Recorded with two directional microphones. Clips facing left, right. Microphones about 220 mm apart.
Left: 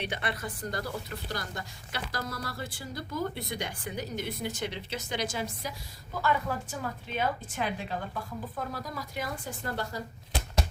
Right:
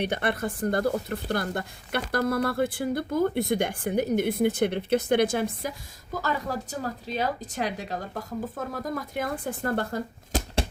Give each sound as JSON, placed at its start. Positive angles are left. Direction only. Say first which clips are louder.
{"t": 0.0, "sound": "speech", "louder": "right 7 dB", "side_deg": -50}
{"t": 6.2, "sound": "a woman's voice", "louder": "left 1 dB", "side_deg": -40}